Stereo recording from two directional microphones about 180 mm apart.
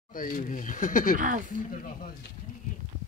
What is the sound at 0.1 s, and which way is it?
Speech, 50° left (ahead or behind).